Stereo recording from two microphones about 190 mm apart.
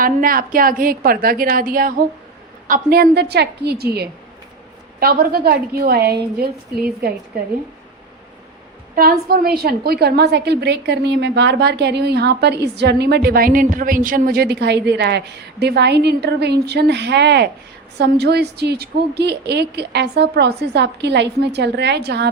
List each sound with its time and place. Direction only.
0.0 s a woman's voice: 50° right (ahead or behind)
9.0 s a woman's voice: 50° right (ahead or behind)